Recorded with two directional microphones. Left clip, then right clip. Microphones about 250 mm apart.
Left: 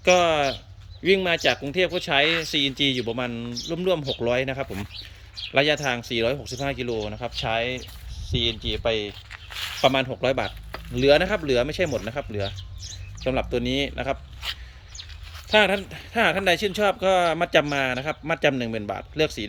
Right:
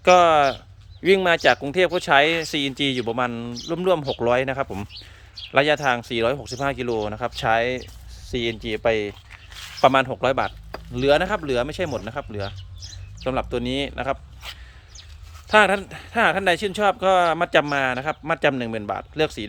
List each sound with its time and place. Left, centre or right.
0.0 s speech: centre